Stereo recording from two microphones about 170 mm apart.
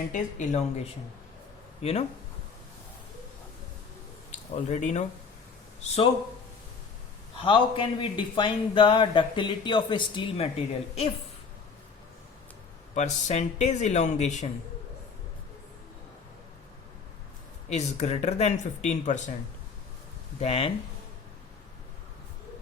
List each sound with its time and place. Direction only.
0.1 s speech: 45° left (ahead or behind)
4.5 s speech: 45° left (ahead or behind)
7.3 s a man's voice: 30° left (ahead or behind)
12.9 s speech: 40° left (ahead or behind)
17.7 s speech: 40° left (ahead or behind)
20.4 s speech: 35° left (ahead or behind)